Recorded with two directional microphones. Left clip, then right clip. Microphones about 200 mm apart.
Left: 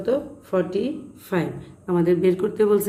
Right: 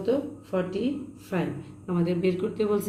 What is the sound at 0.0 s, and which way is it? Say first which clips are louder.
A woman's voice: left 3 dB; 55° left (ahead or behind).